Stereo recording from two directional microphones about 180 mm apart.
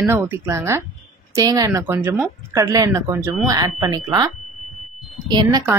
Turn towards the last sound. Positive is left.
turn(degrees=-25)  # may be behind; listen again after turning